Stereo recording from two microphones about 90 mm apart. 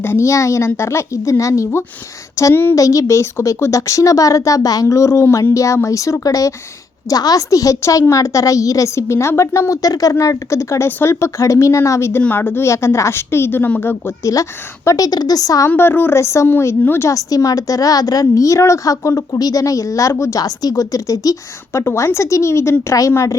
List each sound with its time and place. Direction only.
0.0 s a woman's voice: 30° left (ahead or behind)
2.7 s a woman's voice: 40° left (ahead or behind)
12.2 s speech: 20° left (ahead or behind)
14.8 s a woman's voice: 40° left (ahead or behind)
15.7 s a woman's voice: 25° left (ahead or behind)